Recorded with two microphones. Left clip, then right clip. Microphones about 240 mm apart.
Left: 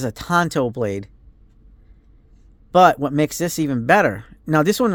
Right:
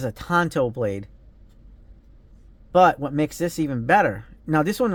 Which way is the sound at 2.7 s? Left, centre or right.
Left.